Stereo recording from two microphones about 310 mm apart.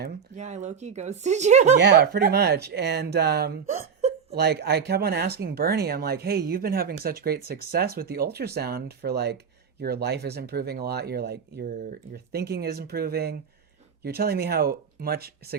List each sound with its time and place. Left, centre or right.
0.0 s speech: right
1.7 s speech: right